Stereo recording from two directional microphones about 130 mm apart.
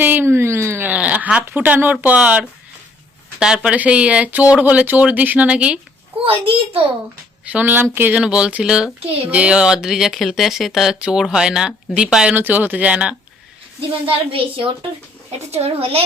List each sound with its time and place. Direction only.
0.0 s speech: 15° right (ahead or behind)
6.2 s a woman's voice: 45° right (ahead or behind)
7.4 s speech: 15° right (ahead or behind)
14.1 s a woman's voice: 45° right (ahead or behind)
15.4 s a woman's voice: 55° right (ahead or behind)